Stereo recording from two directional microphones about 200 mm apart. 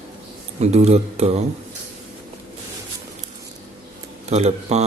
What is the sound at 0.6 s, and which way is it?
Speech, 35° right (ahead or behind).